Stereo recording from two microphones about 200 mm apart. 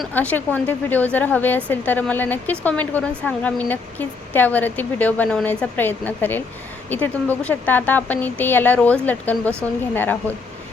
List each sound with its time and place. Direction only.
0.0 s speech: 5° left (ahead or behind)